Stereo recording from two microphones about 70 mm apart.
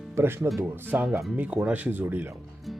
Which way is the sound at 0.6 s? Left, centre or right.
Right.